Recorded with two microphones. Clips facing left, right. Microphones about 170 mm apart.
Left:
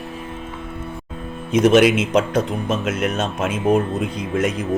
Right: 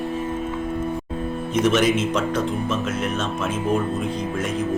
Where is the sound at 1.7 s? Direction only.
75° left (ahead or behind).